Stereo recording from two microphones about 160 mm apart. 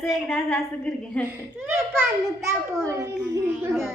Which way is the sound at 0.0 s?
Centre (ahead or behind).